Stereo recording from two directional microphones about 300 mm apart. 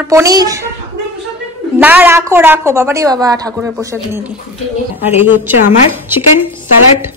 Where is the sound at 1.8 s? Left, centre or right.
Centre.